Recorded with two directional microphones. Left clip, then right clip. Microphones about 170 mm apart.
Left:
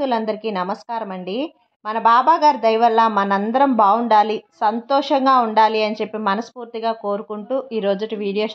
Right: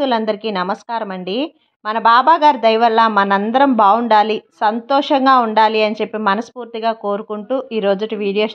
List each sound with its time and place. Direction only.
0.0 s a woman's voice: 25° right (ahead or behind)